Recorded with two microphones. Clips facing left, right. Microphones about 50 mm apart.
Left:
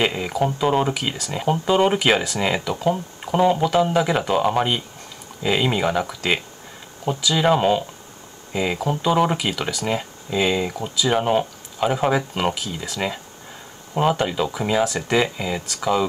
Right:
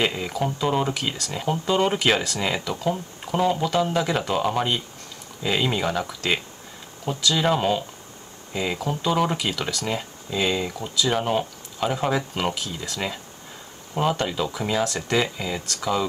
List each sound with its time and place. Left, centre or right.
0.0 s speech: centre